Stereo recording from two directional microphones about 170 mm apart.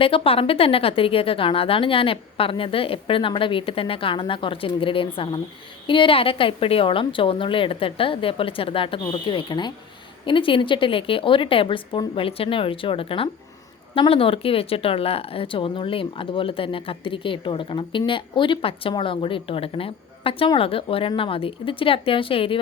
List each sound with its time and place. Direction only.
0.0 s speech: 35° left (ahead or behind)